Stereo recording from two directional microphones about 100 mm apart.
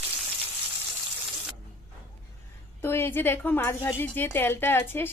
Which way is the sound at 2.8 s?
25° left (ahead or behind).